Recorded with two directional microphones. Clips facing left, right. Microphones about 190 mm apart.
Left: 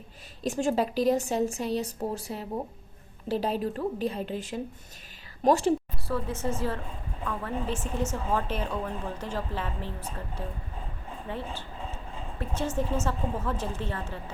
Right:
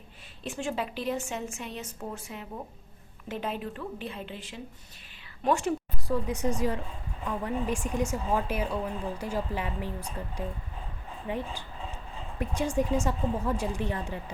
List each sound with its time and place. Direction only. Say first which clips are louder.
0.4 s a woman's voice: left 6 dB; 40° left (ahead or behind)
6.1 s speech: right 2 dB; 15° right (ahead or behind)